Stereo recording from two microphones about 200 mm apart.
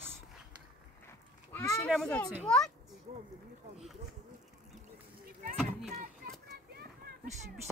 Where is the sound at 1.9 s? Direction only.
Centre (ahead or behind).